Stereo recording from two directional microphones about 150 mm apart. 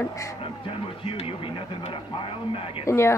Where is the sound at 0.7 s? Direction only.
40° left (ahead or behind).